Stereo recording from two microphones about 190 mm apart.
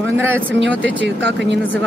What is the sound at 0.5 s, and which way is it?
Speech, 70° right (ahead or behind).